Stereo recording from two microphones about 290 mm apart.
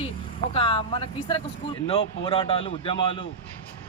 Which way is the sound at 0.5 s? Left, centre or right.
Centre.